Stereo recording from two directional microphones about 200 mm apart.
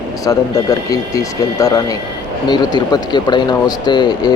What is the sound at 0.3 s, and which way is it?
Speech, 15° left (ahead or behind).